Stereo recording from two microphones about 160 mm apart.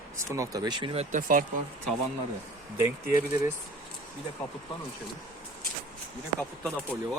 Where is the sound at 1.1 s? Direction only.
60° right (ahead or behind).